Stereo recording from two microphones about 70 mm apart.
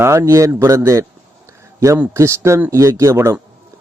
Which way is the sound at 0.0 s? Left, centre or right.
Right.